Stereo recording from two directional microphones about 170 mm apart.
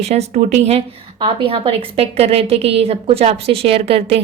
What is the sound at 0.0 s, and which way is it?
A woman's voice, 40° right (ahead or behind).